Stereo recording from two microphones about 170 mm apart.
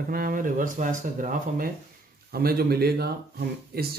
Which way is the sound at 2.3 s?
65° right (ahead or behind).